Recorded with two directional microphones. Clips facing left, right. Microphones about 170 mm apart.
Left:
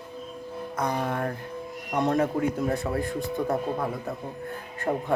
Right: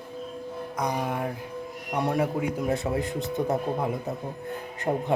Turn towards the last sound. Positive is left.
turn(degrees=-20)  # may be behind; listen again after turning